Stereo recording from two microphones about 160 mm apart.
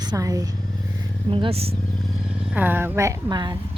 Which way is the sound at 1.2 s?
35° right (ahead or behind).